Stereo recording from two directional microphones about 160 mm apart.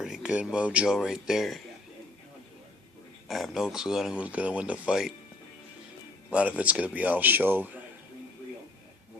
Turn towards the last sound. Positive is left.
turn(degrees=-10)  # may be behind; listen again after turning